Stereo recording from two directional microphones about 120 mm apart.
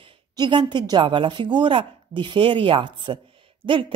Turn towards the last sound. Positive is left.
turn(degrees=-45)  # may be behind; listen again after turning